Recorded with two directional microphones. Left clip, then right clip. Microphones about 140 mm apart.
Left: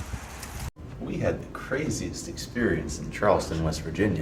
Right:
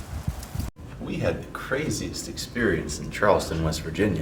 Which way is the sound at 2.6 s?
15° right (ahead or behind).